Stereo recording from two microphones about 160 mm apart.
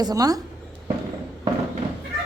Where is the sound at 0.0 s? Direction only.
25° right (ahead or behind).